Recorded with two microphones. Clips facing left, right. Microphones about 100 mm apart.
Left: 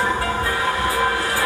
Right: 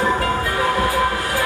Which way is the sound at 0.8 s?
30° left (ahead or behind).